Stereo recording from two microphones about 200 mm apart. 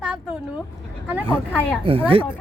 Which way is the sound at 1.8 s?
25° right (ahead or behind).